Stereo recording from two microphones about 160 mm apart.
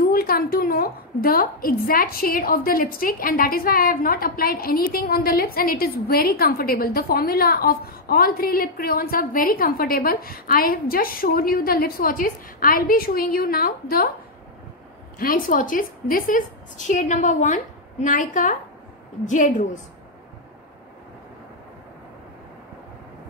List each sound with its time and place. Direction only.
0.0 s a woman's voice: 65° left (ahead or behind)
15.1 s a woman's voice: 60° left (ahead or behind)